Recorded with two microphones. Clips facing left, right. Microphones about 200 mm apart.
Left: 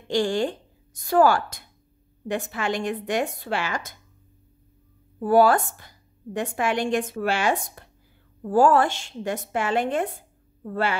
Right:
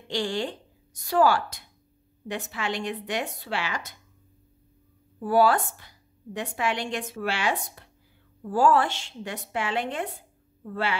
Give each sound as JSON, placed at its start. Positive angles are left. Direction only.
{"t": 0.1, "sound": "a woman's voice", "side_deg": 45}
{"t": 5.2, "sound": "a woman's voice", "side_deg": 45}